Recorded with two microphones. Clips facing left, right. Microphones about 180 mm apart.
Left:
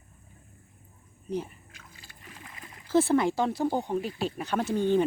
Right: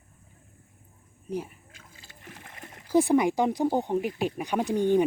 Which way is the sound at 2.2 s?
50° right (ahead or behind).